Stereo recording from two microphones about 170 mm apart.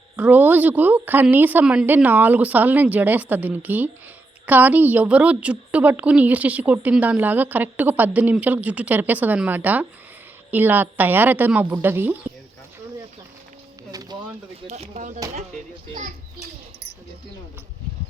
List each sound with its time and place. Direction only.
0.2 s a woman's voice: 10° right (ahead or behind)
13.9 s pigeon: 20° right (ahead or behind)
14.7 s speech: 45° right (ahead or behind)